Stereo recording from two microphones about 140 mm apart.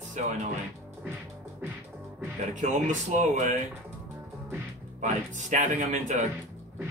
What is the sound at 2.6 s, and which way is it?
Speech, 60° right (ahead or behind).